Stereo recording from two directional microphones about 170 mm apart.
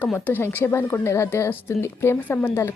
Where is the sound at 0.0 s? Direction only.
10° left (ahead or behind).